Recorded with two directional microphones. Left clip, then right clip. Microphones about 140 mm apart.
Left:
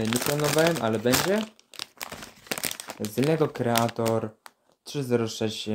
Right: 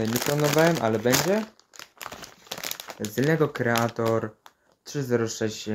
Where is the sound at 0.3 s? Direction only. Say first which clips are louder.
Right 3 dB; 20° left (ahead or behind).